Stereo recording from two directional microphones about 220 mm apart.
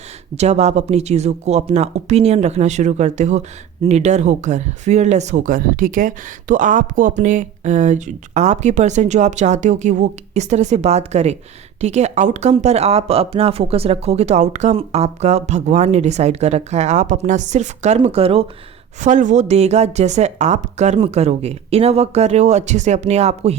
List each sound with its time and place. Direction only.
0.3 s a woman's voice: 30° right (ahead or behind)